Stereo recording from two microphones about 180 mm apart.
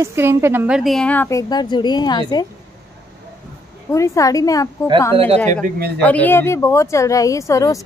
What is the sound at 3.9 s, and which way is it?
A woman's voice, 15° left (ahead or behind).